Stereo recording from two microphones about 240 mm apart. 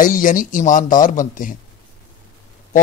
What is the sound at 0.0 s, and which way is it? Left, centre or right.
Speech, left.